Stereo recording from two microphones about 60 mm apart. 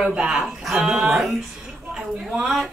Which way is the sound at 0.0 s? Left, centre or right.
Centre.